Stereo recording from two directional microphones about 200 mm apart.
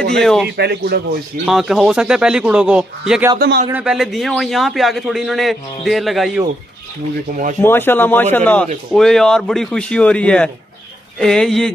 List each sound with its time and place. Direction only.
0.0 s speech: 5° left (ahead or behind)
0.6 s speech: 55° right (ahead or behind)
1.4 s a man's voice: centre (ahead or behind)
3.3 s speech: 50° right (ahead or behind)
3.7 s a man's voice: 5° right (ahead or behind)
7.6 s a man's voice: 10° left (ahead or behind)